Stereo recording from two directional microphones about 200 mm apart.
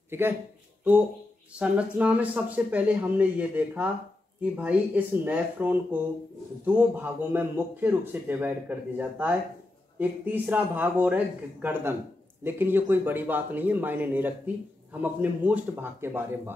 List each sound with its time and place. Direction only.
1.5 s speech: 5° right (ahead or behind)